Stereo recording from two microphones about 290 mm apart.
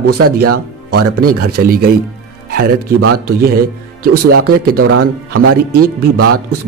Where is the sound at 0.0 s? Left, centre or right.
Right.